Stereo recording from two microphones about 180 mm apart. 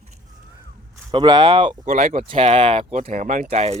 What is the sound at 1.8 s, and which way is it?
Speech, 40° right (ahead or behind).